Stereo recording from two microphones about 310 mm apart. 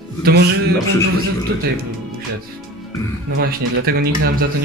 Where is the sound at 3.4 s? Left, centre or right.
Right.